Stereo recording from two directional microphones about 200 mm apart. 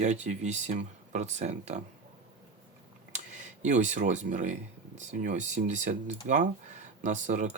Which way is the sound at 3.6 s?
35° right (ahead or behind).